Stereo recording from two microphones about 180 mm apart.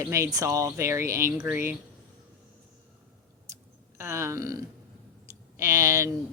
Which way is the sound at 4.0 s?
15° right (ahead or behind).